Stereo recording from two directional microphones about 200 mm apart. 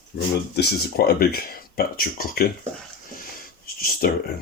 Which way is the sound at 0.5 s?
50° left (ahead or behind).